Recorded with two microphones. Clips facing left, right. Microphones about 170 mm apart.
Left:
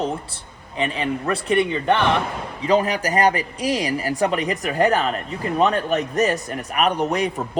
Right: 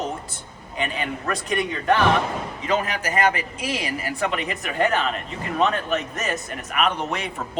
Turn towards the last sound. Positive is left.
turn(degrees=40)  # may be behind; listen again after turning